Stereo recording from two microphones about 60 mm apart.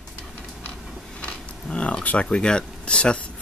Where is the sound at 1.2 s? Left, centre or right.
Centre.